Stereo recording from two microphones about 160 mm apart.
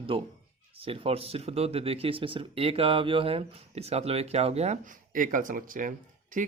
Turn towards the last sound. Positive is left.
turn(degrees=-55)  # may be behind; listen again after turning